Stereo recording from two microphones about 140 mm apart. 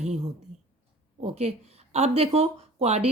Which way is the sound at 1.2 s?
50° right (ahead or behind).